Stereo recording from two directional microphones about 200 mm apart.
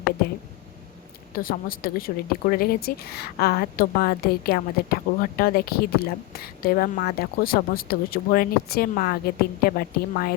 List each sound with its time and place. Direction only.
1.4 s speech: 45° left (ahead or behind)